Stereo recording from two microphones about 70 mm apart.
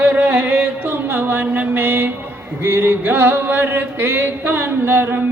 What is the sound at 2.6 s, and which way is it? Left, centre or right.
Music, right.